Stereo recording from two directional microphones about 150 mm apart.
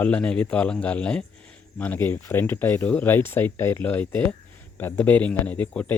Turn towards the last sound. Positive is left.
turn(degrees=10)  # may be behind; listen again after turning